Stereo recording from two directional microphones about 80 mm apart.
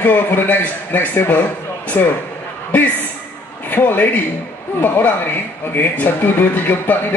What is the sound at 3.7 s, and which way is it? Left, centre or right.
A man's voice, left.